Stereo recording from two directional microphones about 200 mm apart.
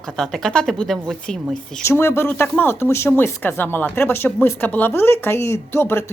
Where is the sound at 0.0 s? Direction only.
5° left (ahead or behind).